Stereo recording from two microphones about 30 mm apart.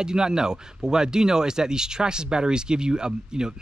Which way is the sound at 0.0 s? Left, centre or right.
Right.